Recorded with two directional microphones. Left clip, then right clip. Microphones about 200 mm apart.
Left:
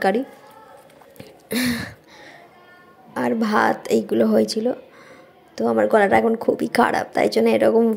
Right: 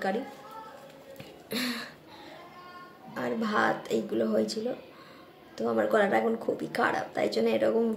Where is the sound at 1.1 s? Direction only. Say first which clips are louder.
Left 9 dB; 40° left (ahead or behind).